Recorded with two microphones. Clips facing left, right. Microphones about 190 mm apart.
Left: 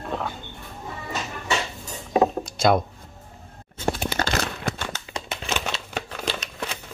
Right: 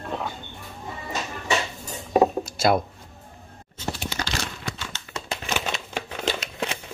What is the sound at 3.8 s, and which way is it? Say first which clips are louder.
Crumpling: left 6 dB; 55° left (ahead or behind).